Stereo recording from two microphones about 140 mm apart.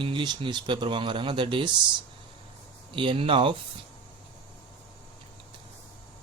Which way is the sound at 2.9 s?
40° right (ahead or behind).